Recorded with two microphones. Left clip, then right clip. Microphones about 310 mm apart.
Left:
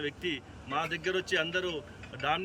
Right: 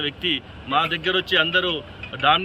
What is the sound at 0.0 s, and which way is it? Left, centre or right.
Speech, centre.